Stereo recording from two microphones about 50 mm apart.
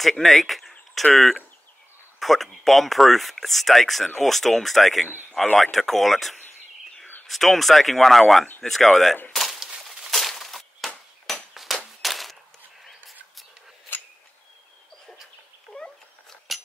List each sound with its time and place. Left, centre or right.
0.2 s bird: centre
1.1 s speech: centre
9.3 s a sound: centre
15.7 s cat: centre